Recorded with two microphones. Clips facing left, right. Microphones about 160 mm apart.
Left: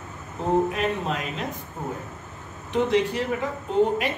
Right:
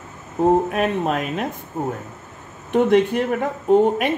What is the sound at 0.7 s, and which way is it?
Speech, 55° right (ahead or behind).